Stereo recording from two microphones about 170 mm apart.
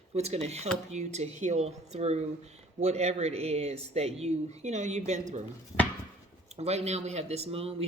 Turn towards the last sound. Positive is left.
turn(degrees=-35)  # may be behind; listen again after turning